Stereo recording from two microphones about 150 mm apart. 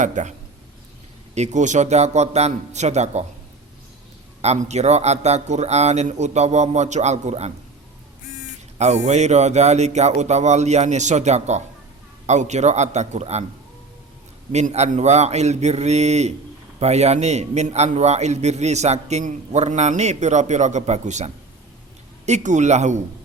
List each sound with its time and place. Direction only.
0.0 s a man's voice: 55° right (ahead or behind)
1.4 s a man's voice: 50° right (ahead or behind)
4.4 s a man's voice: 45° right (ahead or behind)
8.8 s a man's voice: 50° right (ahead or behind)
14.5 s a man's voice: 45° right (ahead or behind)